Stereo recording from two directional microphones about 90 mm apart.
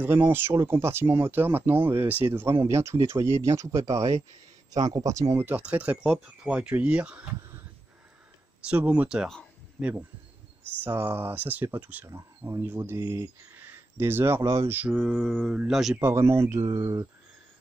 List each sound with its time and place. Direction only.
0.0 s speech: 25° right (ahead or behind)
4.7 s speech: 50° right (ahead or behind)
5.4 s speech: 20° right (ahead or behind)
8.6 s speech: 15° right (ahead or behind)
10.8 s speech: 25° right (ahead or behind)
14.7 s speech: 20° right (ahead or behind)
15.1 s speech: centre (ahead or behind)
16.0 s speech: 30° right (ahead or behind)